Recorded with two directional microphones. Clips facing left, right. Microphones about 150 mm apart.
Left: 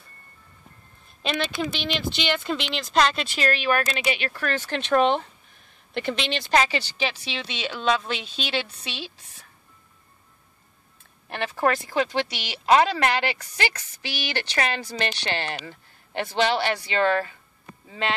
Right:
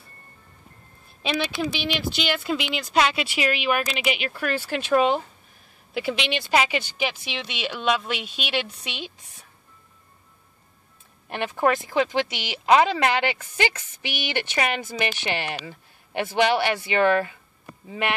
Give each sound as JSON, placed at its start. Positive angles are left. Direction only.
{"t": 1.2, "sound": "speech", "side_deg": -10}
{"t": 11.2, "sound": "speech", "side_deg": -15}